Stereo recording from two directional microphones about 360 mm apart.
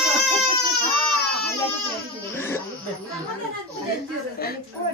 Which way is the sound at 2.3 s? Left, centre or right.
Centre.